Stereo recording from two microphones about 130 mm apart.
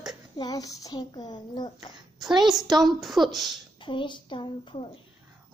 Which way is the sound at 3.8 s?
40° left (ahead or behind).